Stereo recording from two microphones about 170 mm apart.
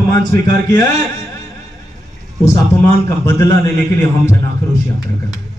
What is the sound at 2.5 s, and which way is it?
Speech, 15° left (ahead or behind).